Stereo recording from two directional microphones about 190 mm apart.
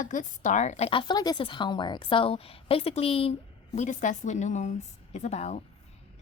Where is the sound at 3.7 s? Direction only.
40° left (ahead or behind).